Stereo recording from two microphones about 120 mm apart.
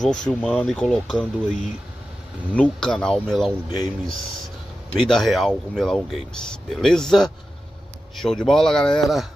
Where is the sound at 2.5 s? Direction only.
10° left (ahead or behind).